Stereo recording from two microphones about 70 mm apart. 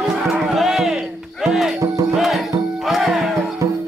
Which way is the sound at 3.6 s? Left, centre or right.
Right.